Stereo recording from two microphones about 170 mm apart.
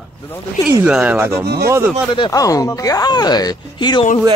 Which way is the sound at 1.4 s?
70° right (ahead or behind).